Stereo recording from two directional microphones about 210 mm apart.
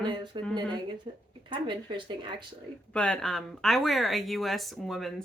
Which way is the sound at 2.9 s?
5° left (ahead or behind).